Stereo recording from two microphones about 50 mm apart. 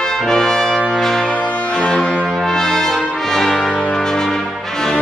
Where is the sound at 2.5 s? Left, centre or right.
Centre.